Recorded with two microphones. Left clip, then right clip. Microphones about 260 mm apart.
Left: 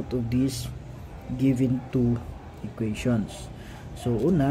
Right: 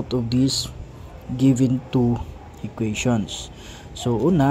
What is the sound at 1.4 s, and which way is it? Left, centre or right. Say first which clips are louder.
Speech: right 5 dB; right.